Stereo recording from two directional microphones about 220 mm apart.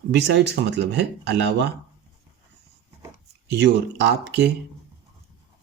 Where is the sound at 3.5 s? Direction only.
55° right (ahead or behind).